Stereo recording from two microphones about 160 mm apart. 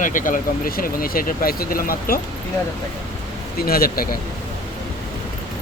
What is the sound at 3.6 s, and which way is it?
Speech, 70° left (ahead or behind).